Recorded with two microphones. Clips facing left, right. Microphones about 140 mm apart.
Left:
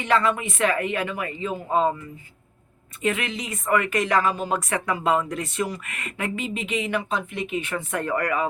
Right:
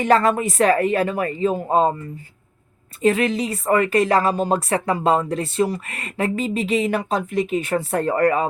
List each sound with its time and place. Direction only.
0.0 s a woman's voice: 40° right (ahead or behind)
3.0 s a woman's voice: 35° right (ahead or behind)